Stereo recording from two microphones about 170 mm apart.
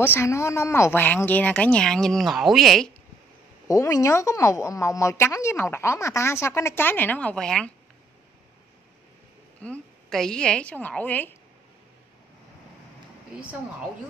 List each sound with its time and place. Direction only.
0.0 s speech: 15° left (ahead or behind)
3.6 s speech: 20° left (ahead or behind)
9.6 s a woman's voice: 5° left (ahead or behind)